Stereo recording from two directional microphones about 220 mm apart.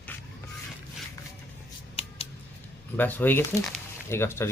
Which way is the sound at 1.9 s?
25° left (ahead or behind).